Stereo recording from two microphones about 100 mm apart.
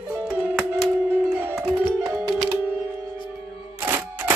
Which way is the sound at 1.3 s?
20° right (ahead or behind).